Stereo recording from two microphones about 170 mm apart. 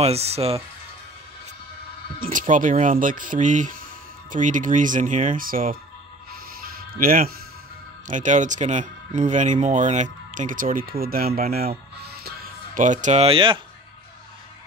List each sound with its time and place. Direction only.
0.0 s speech: 35° right (ahead or behind)
2.1 s speech: 55° right (ahead or behind)
6.6 s music: 55° right (ahead or behind)
8.1 s speech: 45° right (ahead or behind); by 11.4 s 60° right (ahead or behind)
11.5 s music: 65° right (ahead or behind); by 13.6 s 30° right (ahead or behind)